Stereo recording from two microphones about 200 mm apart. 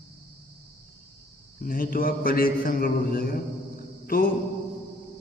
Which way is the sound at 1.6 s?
45° left (ahead or behind).